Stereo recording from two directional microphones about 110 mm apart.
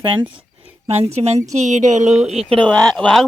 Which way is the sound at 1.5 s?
90° right.